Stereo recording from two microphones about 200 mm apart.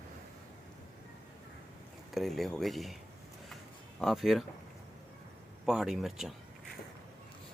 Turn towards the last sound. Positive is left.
turn(degrees=0)  # may be behind; listen again after turning